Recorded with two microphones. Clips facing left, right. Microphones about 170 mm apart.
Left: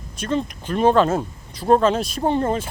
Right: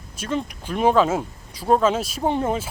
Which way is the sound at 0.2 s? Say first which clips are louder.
Left 3 dB; 10° right (ahead or behind).